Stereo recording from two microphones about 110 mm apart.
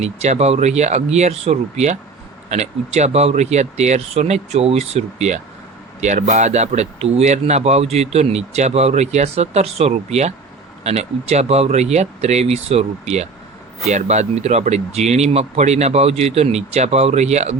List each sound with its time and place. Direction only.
0.0 s speech: 85° right
10.8 s speech: 80° right
13.8 s speech: 90° right